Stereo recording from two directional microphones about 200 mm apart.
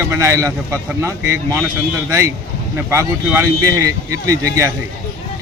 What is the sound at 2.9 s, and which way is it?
Speech, 15° right (ahead or behind).